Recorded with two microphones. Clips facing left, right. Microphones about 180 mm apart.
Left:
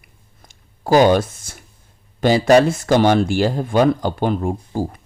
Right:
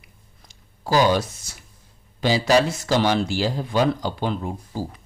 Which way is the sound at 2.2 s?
55° left (ahead or behind).